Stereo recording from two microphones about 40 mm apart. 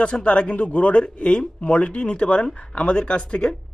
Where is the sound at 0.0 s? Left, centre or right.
Left.